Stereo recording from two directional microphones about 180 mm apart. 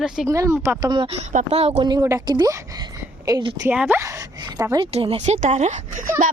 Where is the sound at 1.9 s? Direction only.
15° right (ahead or behind).